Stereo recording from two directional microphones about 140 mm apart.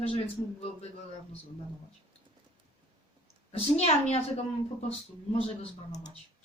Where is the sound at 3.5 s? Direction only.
50° left (ahead or behind).